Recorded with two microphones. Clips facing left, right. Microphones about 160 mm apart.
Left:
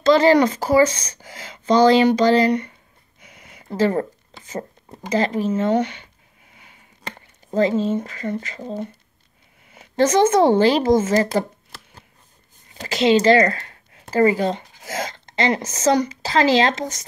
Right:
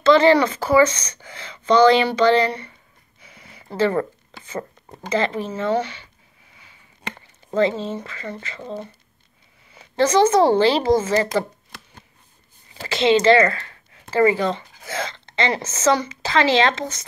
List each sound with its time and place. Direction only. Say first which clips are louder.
0.0 s speech: even; 40° left (ahead or behind)
3.7 s speech: left 1 dB; 40° left (ahead or behind)
5.1 s speech: left 3 dB; 40° left (ahead or behind)
7.2 s speech: even; 40° left (ahead or behind)
12.8 s speech: even; 40° left (ahead or behind)